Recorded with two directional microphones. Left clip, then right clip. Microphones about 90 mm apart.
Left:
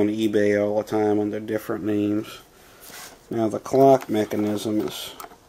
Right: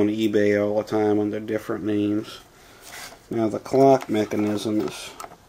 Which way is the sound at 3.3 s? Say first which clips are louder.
Even; 10° left (ahead or behind).